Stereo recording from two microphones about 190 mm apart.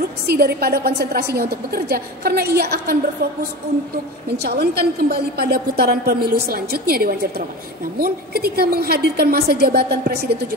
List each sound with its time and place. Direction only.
0.3 s a woman's voice: 55° right (ahead or behind)
4.4 s a woman's voice: 60° right (ahead or behind)